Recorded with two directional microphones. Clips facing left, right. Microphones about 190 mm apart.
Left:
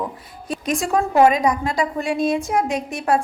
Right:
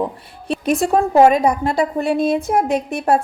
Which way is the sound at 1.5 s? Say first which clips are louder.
Right 3 dB; 60° right (ahead or behind).